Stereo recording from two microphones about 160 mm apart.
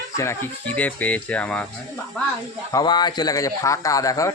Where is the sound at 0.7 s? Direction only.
10° left (ahead or behind).